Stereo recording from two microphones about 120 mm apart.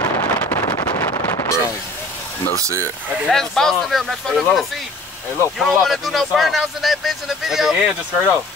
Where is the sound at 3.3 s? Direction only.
5° left (ahead or behind).